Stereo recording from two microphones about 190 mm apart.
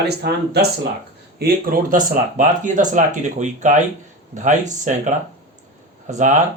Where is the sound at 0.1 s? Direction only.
60° right (ahead or behind).